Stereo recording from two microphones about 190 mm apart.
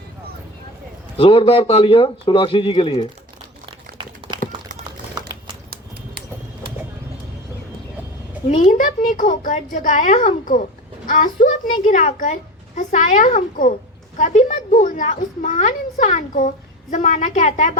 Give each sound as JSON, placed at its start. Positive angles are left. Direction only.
{"t": 1.1, "sound": "a man's voice", "side_deg": 30}
{"t": 5.7, "sound": "a sound", "side_deg": -55}
{"t": 8.4, "sound": "a woman's voice", "side_deg": 40}